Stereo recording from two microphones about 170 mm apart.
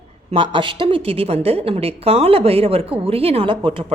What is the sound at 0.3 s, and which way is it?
A woman's voice, 30° right (ahead or behind).